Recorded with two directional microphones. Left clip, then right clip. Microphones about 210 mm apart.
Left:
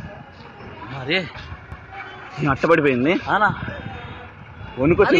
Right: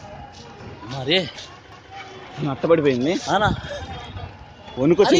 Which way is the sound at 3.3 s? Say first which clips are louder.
Left 1 dB; 55° right (ahead or behind).